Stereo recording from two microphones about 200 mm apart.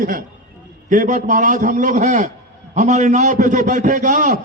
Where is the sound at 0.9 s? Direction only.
40° right (ahead or behind).